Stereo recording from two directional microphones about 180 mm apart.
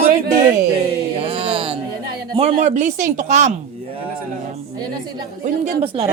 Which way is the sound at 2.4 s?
35° right (ahead or behind).